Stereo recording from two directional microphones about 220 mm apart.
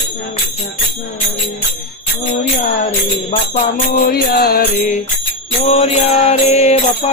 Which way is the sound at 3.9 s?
40° left (ahead or behind).